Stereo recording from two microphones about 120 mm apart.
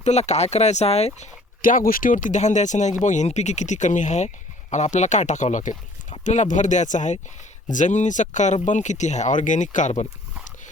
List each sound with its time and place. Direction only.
0.0 s speech: 65° left (ahead or behind)
1.7 s speech: 90° left